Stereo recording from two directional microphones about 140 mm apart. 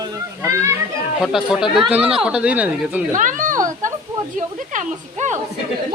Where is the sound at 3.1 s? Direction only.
70° right (ahead or behind).